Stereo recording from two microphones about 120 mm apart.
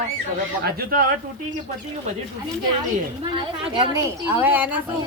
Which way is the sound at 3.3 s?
45° right (ahead or behind).